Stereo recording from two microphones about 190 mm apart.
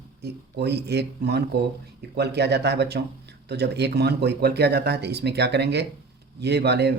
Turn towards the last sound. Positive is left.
turn(degrees=-60)  # may be behind; listen again after turning